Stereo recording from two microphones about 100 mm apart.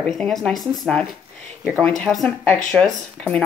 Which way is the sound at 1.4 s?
10° left (ahead or behind).